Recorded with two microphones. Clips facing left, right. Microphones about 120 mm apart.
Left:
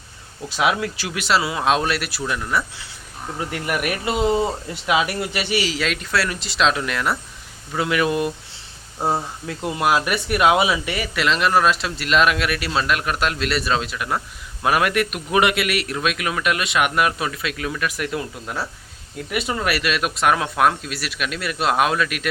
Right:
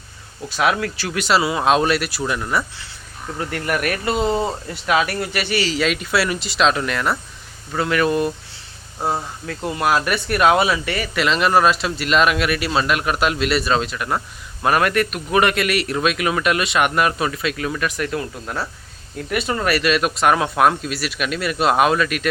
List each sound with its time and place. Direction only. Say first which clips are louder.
0.4 s speech: right 1 dB; 20° left (ahead or behind)
1.1 s speech: right 3 dB; centre (ahead or behind)
3.3 s speech: right 2 dB; 10° left (ahead or behind)
5.7 s speech: right 3 dB; centre (ahead or behind)